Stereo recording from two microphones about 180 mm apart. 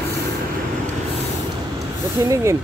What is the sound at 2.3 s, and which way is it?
Speech, 15° right (ahead or behind).